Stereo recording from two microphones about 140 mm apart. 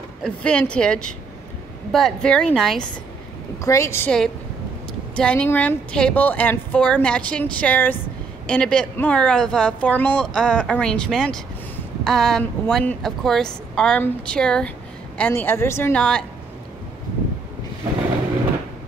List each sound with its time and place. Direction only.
0.2 s a woman's voice: 10° left (ahead or behind)
3.6 s a woman's voice: 20° left (ahead or behind)
5.1 s a woman's voice: 5° left (ahead or behind)
15.9 s speech: 5° left (ahead or behind)